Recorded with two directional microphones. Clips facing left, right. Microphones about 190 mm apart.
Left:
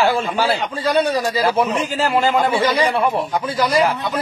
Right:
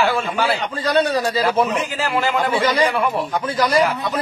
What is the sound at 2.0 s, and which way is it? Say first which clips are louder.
Speech: left 4 dB; 30° left (ahead or behind).